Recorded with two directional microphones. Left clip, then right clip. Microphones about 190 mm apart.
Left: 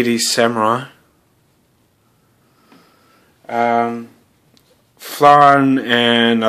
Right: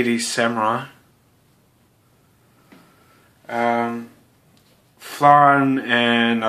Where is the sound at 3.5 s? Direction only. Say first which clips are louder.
Left 5 dB; 40° left (ahead or behind).